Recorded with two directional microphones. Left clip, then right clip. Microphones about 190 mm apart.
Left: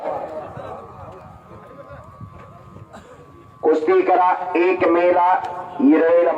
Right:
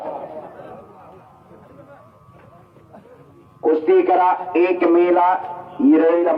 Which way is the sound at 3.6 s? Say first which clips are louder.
Even; 35° left (ahead or behind).